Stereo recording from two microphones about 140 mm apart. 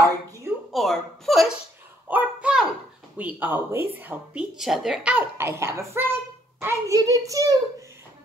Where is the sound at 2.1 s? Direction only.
10° right (ahead or behind).